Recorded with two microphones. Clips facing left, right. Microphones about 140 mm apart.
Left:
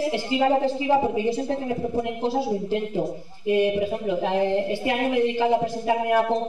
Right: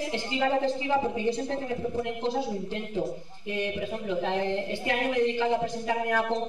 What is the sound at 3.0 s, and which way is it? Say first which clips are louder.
Speech: left 4 dB; 15° left (ahead or behind).